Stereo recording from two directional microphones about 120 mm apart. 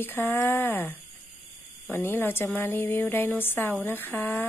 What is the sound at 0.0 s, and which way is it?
A woman's voice, 20° left (ahead or behind).